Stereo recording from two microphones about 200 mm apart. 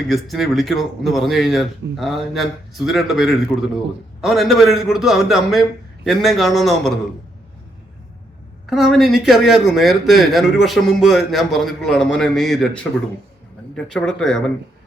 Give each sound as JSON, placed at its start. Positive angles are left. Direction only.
{"t": 0.1, "sound": "speech", "side_deg": 0}
{"t": 8.6, "sound": "speech", "side_deg": 0}